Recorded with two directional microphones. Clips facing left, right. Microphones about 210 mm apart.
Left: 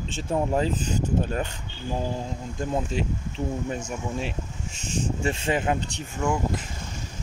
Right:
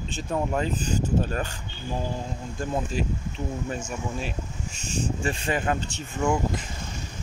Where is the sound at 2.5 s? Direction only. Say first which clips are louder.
Left 1 dB; 20° left (ahead or behind).